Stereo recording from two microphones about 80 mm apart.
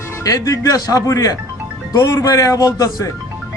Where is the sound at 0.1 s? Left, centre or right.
Left.